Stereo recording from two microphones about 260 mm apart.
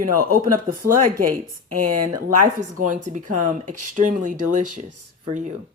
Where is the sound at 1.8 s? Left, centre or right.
Right.